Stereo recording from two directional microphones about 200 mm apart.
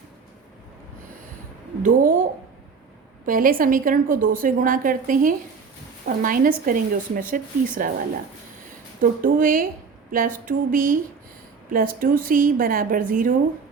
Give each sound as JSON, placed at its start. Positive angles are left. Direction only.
{"t": 1.8, "sound": "speech", "side_deg": -40}
{"t": 3.2, "sound": "a woman's voice", "side_deg": -45}
{"t": 9.0, "sound": "a woman's voice", "side_deg": -45}